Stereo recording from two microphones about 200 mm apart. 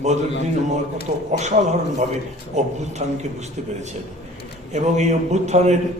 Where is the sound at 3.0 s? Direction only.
35° right (ahead or behind).